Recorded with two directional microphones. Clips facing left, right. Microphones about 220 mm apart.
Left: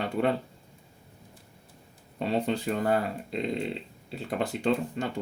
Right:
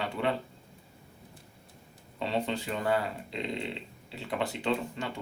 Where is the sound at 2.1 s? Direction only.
45° left (ahead or behind).